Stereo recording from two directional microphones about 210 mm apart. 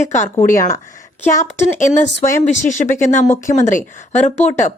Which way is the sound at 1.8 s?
35° left (ahead or behind).